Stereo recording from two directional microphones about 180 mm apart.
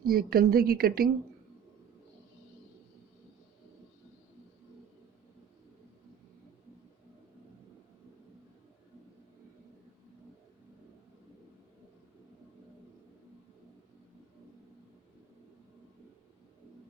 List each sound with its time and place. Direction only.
0.0 s speech: 55° right (ahead or behind)